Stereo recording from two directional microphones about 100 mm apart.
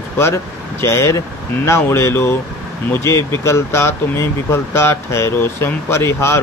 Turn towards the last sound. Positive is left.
turn(degrees=25)  # may be behind; listen again after turning